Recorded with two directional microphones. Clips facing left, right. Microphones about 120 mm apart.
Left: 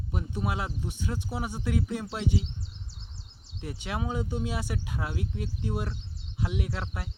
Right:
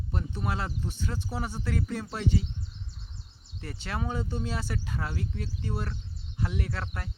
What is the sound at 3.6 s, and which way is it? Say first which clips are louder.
Speech: left 1 dB; 10° left (ahead or behind).